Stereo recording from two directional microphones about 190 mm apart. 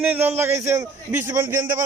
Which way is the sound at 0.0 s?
10° right (ahead or behind).